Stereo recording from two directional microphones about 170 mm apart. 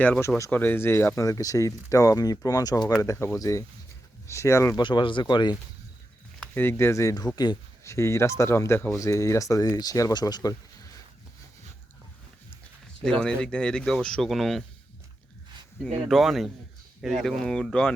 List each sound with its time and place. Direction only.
0.0 s speech: 10° left (ahead or behind)
4.8 s speech: 30° left (ahead or behind)
6.5 s speech: 15° left (ahead or behind)
13.1 s speech: 5° left (ahead or behind)
16.0 s speech: centre (ahead or behind)